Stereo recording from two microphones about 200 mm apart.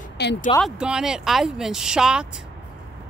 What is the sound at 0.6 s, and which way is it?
Speech, 5° right (ahead or behind).